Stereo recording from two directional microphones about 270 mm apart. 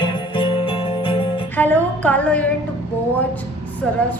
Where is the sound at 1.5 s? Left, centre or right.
Centre.